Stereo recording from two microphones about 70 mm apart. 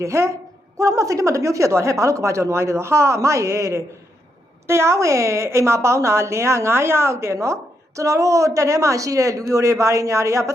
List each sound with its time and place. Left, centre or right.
0.0 s a woman's voice: right